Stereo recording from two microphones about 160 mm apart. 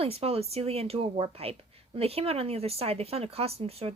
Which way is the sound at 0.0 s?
40° right (ahead or behind).